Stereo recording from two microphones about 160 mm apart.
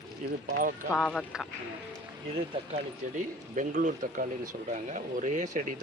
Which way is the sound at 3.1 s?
50° right (ahead or behind).